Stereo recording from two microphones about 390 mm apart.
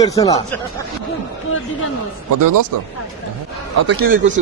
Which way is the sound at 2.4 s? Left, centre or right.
Right.